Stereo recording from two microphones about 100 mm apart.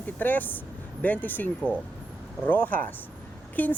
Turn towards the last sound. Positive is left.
turn(degrees=15)  # may be behind; listen again after turning